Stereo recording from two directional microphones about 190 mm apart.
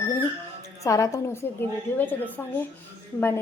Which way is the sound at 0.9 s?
15° left (ahead or behind).